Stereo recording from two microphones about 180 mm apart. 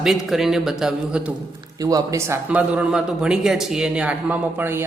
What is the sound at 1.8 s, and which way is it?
A man's voice, 20° right (ahead or behind).